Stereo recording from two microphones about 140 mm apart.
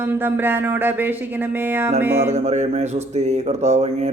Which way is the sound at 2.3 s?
55° right (ahead or behind).